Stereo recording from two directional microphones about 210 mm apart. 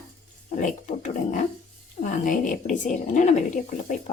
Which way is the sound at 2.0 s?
35° left (ahead or behind).